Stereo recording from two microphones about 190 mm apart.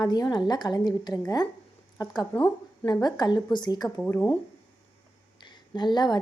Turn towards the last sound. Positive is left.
turn(degrees=20)  # may be behind; listen again after turning